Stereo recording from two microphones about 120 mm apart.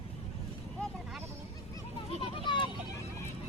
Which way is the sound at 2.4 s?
40° left (ahead or behind).